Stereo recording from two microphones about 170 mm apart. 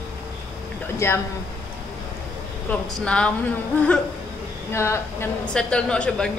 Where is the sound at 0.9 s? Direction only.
15° left (ahead or behind).